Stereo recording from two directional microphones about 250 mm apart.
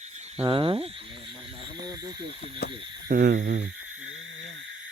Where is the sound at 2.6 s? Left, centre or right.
Left.